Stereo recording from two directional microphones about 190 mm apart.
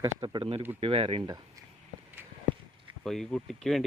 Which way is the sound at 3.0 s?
Centre (ahead or behind).